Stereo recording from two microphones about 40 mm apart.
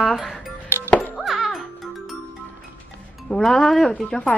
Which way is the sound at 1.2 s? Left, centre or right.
Centre.